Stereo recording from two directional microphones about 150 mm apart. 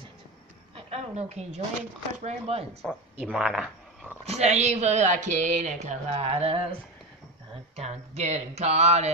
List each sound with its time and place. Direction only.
0.7 s speech: 45° right (ahead or behind)
2.8 s speech: centre (ahead or behind)
4.2 s speech: 45° right (ahead or behind)
7.7 s speech: 45° right (ahead or behind)